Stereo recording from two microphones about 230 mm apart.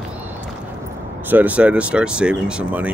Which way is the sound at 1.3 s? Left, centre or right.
Centre.